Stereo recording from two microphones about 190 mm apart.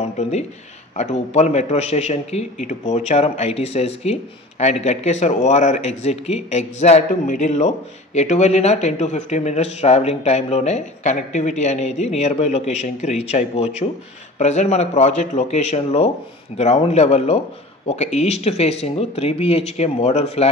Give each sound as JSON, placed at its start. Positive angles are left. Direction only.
{"t": 0.0, "sound": "a man's voice", "side_deg": 35}